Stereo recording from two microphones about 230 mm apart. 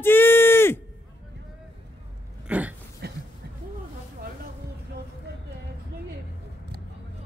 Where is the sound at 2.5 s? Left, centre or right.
Centre.